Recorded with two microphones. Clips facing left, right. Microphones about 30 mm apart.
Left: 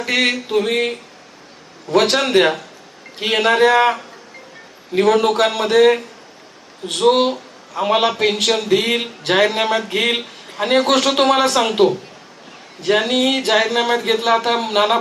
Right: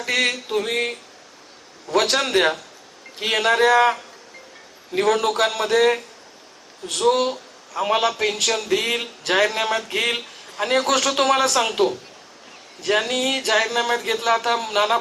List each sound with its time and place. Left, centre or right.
0.0 s a sound: left
0.5 s speech: left
1.9 s speech: left
2.1 s a man's voice: left
4.9 s speech: left
7.1 s speech: left
8.4 s a man's voice: left